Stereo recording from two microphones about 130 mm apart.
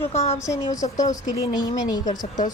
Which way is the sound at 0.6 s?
70° left (ahead or behind).